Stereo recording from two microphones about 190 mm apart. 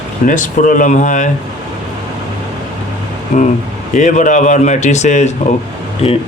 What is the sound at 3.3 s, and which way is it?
Speech, 40° left (ahead or behind).